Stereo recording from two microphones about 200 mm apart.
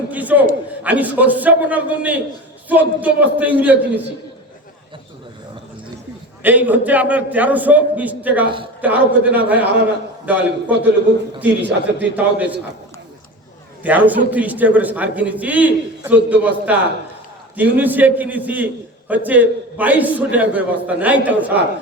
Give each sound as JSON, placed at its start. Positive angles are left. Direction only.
{"t": 0.1, "sound": "a man's voice", "side_deg": -10}
{"t": 6.4, "sound": "a man's voice", "side_deg": -10}
{"t": 8.4, "sound": "a man's voice", "side_deg": -25}
{"t": 8.8, "sound": "a man's voice", "side_deg": -10}
{"t": 13.8, "sound": "a man's voice", "side_deg": -10}